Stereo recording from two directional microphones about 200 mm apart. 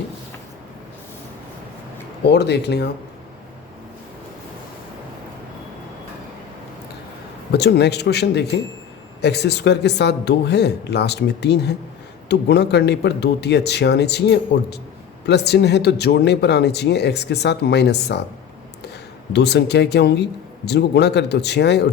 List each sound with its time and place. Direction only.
2.2 s speech: 55° left (ahead or behind)
7.5 s speech: 55° left (ahead or behind)
19.3 s speech: 55° left (ahead or behind)